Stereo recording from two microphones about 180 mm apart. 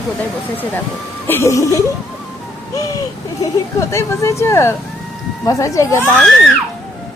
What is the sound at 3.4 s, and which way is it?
Speech, 15° left (ahead or behind).